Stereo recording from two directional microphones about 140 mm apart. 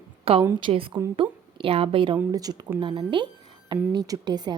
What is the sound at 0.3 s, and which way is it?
A woman's voice, 40° right (ahead or behind).